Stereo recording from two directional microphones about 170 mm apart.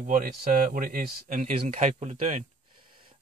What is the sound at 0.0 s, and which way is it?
A man's voice, 55° right (ahead or behind).